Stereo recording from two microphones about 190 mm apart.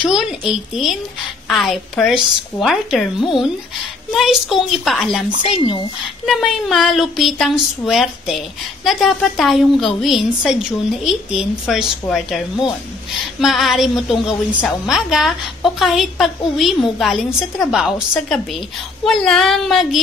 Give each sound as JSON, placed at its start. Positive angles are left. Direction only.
{"t": 0.0, "sound": "a woman's voice", "side_deg": -5}
{"t": 5.4, "sound": "speech", "side_deg": 25}
{"t": 6.2, "sound": "a woman's voice", "side_deg": 0}
{"t": 13.4, "sound": "a woman's voice", "side_deg": 0}